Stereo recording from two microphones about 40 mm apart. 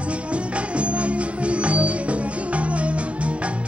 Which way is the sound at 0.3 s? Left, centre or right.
Right.